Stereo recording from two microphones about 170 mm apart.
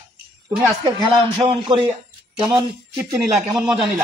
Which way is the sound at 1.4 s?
25° right (ahead or behind).